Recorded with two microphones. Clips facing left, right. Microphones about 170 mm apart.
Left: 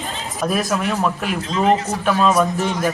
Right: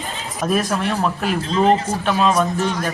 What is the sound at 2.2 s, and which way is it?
Speech, 10° left (ahead or behind).